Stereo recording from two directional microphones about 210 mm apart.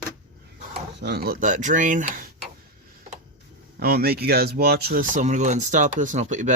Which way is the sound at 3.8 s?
50° right (ahead or behind).